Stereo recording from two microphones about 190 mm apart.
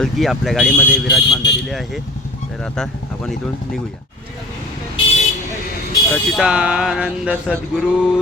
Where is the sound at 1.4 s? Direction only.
65° left (ahead or behind).